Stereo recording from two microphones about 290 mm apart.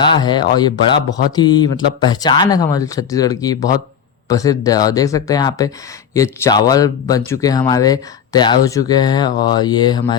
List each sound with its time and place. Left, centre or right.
0.0 s a man's voice: centre